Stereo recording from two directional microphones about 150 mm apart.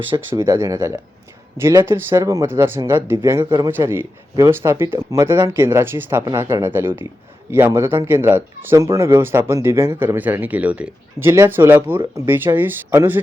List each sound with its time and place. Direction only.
0.1 s speech: 15° right (ahead or behind)